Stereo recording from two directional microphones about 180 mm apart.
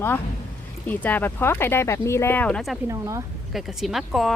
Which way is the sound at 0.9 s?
10° left (ahead or behind).